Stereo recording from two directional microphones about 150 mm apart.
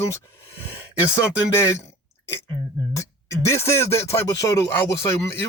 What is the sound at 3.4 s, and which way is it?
Speech, 20° left (ahead or behind).